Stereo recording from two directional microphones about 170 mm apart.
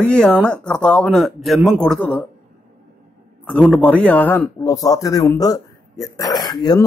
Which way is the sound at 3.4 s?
5° left (ahead or behind).